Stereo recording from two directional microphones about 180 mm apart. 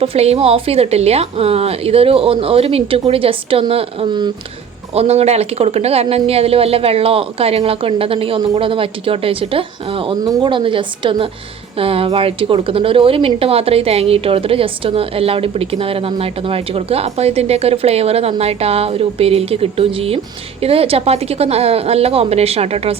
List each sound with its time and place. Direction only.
0.0 s a woman's voice: 35° right (ahead or behind)